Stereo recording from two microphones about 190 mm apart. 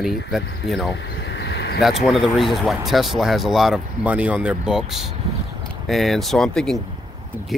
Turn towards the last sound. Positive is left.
turn(degrees=0)  # may be behind; listen again after turning